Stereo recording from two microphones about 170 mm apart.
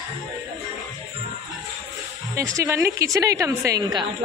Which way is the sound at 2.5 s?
15° right (ahead or behind).